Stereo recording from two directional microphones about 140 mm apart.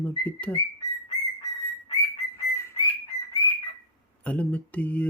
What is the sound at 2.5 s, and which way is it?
Bird, 20° left (ahead or behind).